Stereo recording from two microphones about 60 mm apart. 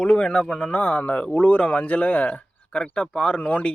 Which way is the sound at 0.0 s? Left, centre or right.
Centre.